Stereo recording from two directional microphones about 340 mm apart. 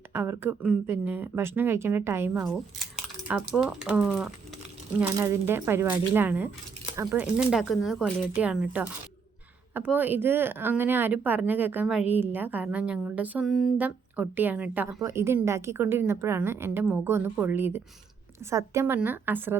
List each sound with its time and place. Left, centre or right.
0.1 s speech: centre